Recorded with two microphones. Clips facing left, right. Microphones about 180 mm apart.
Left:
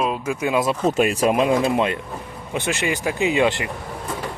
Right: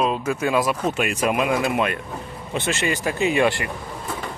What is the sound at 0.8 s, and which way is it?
Speech, 35° left (ahead or behind).